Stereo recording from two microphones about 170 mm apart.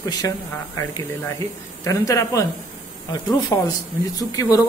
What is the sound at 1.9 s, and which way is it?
A man's voice, 20° left (ahead or behind).